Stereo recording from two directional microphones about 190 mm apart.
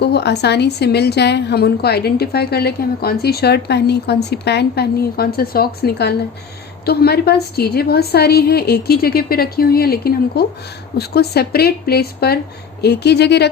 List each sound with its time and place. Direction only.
0.0 s a woman's voice: 60° left (ahead or behind)